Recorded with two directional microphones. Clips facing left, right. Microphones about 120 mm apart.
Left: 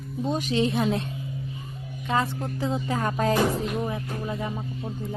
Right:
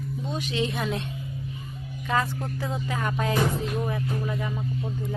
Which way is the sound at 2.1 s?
25° left (ahead or behind).